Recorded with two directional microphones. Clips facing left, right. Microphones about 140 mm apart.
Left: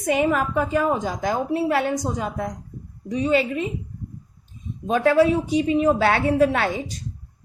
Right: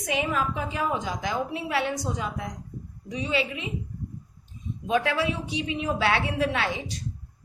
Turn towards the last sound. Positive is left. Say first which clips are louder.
# left 5 dB
turn(degrees=45)  # may be behind; listen again after turning